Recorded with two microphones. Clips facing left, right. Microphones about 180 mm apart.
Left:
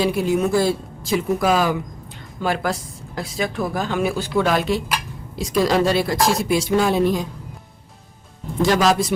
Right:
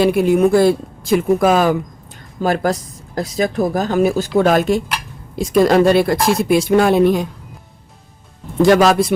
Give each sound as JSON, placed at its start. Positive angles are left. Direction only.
{"t": 0.0, "sound": "speech", "side_deg": -60}
{"t": 8.6, "sound": "speech", "side_deg": -60}